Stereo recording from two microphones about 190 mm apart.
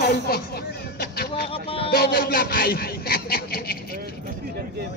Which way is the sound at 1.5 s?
30° left (ahead or behind).